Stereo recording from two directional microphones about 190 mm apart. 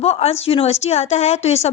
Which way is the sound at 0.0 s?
35° left (ahead or behind).